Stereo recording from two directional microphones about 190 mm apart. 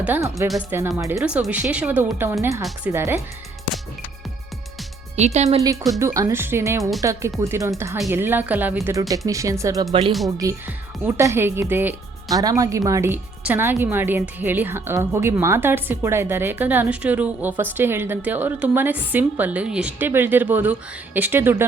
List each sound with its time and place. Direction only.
0.0 s a woman's voice: 15° right (ahead or behind)
0.4 s speech: centre (ahead or behind)
0.8 s a woman's voice: 15° right (ahead or behind)
1.2 s a woman's voice: 5° right (ahead or behind)
5.1 s speech: 35° right (ahead or behind)
6.0 s a woman's voice: 15° right (ahead or behind)